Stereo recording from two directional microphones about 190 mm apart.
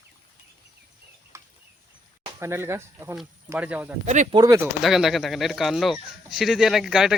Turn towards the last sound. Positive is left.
turn(degrees=0)  # may be behind; listen again after turning